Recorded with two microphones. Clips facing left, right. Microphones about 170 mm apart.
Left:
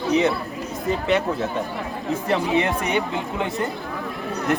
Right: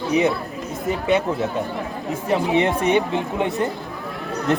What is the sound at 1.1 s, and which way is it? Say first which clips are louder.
Speech: right 3 dB; 20° right (ahead or behind).